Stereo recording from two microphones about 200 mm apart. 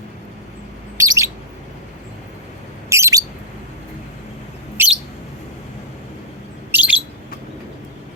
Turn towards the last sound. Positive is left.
turn(degrees=-5)  # may be behind; listen again after turning